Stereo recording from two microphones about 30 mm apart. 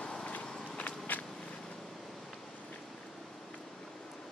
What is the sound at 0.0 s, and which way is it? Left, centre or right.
Walk, left.